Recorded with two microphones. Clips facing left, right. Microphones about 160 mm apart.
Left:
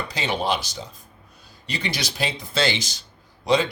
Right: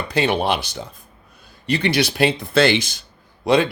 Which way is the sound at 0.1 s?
60° right (ahead or behind).